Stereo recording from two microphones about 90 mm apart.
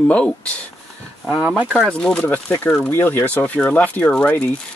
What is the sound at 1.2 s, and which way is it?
Speech, 10° right (ahead or behind).